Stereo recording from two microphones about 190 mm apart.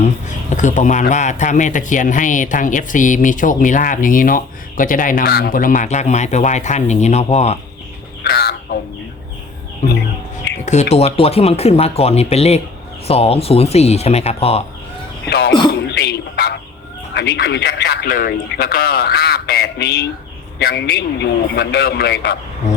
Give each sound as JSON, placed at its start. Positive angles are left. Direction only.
{"t": 0.5, "sound": "speech", "side_deg": 40}
{"t": 8.2, "sound": "fowl", "side_deg": 55}
{"t": 10.9, "sound": "speech", "side_deg": 30}
{"t": 15.3, "sound": "speech", "side_deg": 55}
{"t": 15.9, "sound": "throat clearing", "side_deg": 60}
{"t": 17.2, "sound": "a man's voice", "side_deg": 65}